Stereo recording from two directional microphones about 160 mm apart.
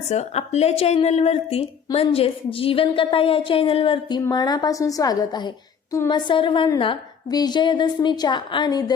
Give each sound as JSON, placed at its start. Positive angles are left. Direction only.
{"t": 0.1, "sound": "a woman's voice", "side_deg": 45}